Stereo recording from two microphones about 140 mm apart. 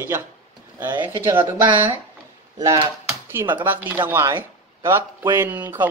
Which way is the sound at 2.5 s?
35° right (ahead or behind).